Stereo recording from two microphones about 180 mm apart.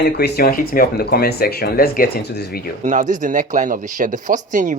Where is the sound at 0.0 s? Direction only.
60° left (ahead or behind).